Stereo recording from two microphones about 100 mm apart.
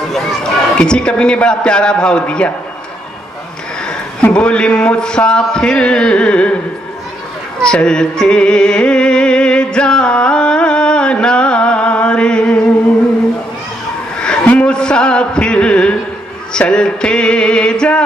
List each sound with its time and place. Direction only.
0.1 s a man's voice: 5° left (ahead or behind)
3.8 s a man's voice: 10° left (ahead or behind)
7.6 s music: 10° left (ahead or behind)
14.2 s a sound: 10° left (ahead or behind)
16.5 s a man's voice: 10° left (ahead or behind)